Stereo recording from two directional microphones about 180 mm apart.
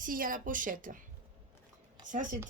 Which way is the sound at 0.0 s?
50° right (ahead or behind).